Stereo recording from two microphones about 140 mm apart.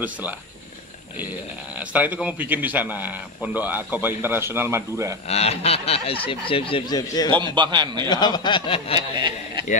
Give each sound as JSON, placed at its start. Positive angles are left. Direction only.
{"t": 1.8, "sound": "a man's voice", "side_deg": -10}
{"t": 5.3, "sound": "speech", "side_deg": 45}
{"t": 7.5, "sound": "a man's voice", "side_deg": -30}
{"t": 8.1, "sound": "speech", "side_deg": 30}
{"t": 8.9, "sound": "a man's voice", "side_deg": -30}